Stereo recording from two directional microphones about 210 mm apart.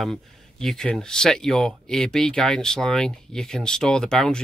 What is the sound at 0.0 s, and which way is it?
Speech, centre (ahead or behind).